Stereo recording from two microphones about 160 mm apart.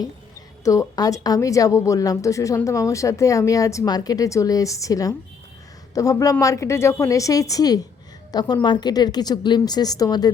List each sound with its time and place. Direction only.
0.6 s a woman's voice: 20° left (ahead or behind)